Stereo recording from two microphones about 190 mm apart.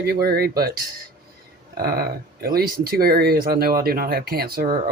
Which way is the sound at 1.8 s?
50° right (ahead or behind).